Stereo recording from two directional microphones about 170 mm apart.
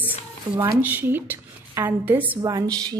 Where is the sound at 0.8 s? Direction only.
10° right (ahead or behind).